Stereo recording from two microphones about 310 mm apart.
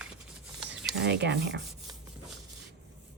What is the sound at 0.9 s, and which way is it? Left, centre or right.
Speech, right.